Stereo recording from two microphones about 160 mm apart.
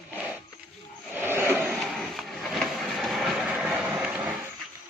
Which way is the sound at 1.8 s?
Centre (ahead or behind).